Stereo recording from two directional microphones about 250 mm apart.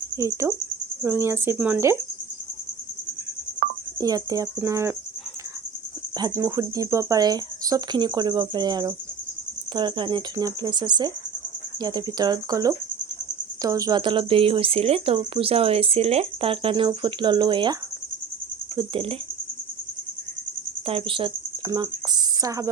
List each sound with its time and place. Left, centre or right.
0.2 s speech: centre
4.0 s speech: centre
6.1 s speech: centre
18.8 s speech: right
20.8 s a woman's voice: right